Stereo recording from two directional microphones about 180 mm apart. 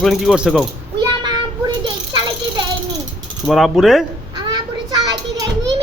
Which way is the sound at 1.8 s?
25° right (ahead or behind).